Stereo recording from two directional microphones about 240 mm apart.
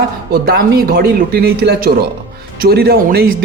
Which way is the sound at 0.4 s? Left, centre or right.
Right.